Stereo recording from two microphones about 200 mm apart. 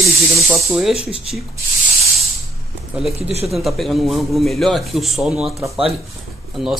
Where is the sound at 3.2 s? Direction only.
30° right (ahead or behind).